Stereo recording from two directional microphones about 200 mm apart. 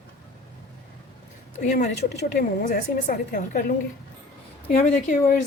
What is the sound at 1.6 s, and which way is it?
A woman's voice, 40° left (ahead or behind).